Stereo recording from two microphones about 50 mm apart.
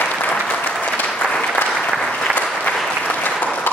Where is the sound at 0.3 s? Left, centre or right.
Left.